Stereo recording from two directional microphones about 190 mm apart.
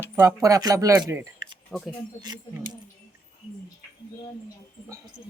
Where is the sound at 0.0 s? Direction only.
15° right (ahead or behind).